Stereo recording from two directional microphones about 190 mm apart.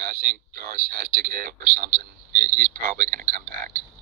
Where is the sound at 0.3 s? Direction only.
50° right (ahead or behind).